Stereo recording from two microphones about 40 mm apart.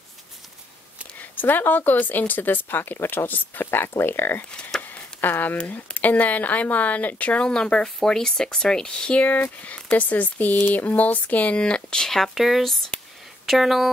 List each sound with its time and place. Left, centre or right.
1.3 s speech: left
4.8 s a sound: left
5.9 s speech: left
7.4 s speech: left
9.2 s speech: left
11.6 s speech: centre
12.2 s speech: centre